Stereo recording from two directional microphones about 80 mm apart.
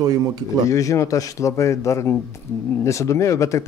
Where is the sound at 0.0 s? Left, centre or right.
Right.